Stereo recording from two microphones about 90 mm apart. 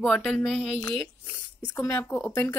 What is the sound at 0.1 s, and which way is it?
Speech, 5° left (ahead or behind).